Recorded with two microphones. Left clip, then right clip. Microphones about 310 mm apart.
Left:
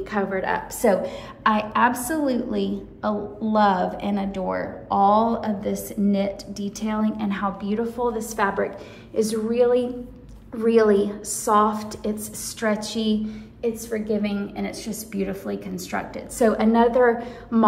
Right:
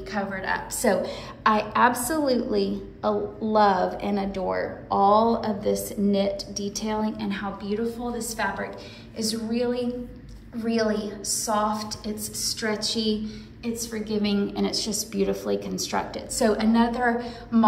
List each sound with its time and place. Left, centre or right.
0.1 s a woman's voice: centre